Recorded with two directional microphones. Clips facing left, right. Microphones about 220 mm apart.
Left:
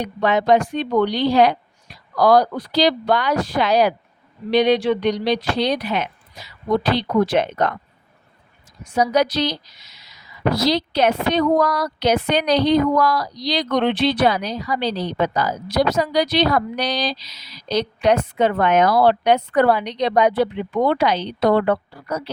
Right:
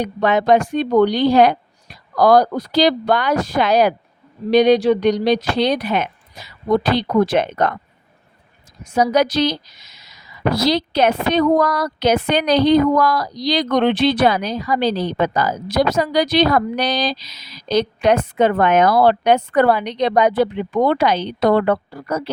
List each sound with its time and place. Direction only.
0.0 s speech: 50° right (ahead or behind)
9.0 s speech: 45° right (ahead or behind)